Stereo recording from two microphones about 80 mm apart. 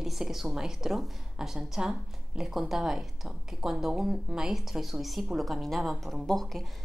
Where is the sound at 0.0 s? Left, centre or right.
Centre.